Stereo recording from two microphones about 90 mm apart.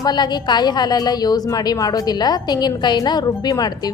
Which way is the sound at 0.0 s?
55° left (ahead or behind).